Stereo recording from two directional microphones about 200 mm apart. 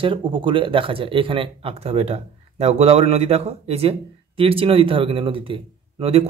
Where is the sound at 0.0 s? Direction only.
25° right (ahead or behind).